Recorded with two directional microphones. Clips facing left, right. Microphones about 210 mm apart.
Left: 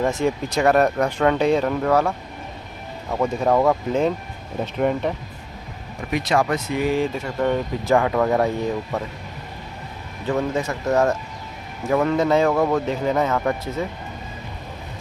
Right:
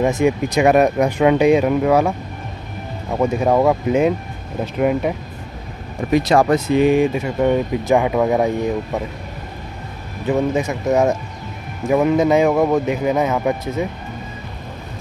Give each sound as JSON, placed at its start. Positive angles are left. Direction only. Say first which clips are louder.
{"t": 0.0, "sound": "speech", "louder": "right 5 dB", "side_deg": -15}
{"t": 5.9, "sound": "speech", "louder": "right 6 dB", "side_deg": -35}
{"t": 10.2, "sound": "speech", "louder": "right 4 dB", "side_deg": -15}